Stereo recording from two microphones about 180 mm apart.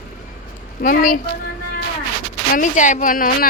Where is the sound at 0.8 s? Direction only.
50° left (ahead or behind).